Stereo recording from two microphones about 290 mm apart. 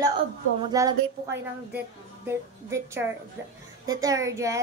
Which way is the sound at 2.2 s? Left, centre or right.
Centre.